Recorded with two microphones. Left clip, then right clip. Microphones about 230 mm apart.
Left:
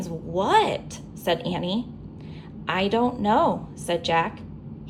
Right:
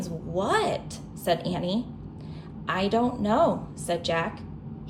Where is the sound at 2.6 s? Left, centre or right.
Left.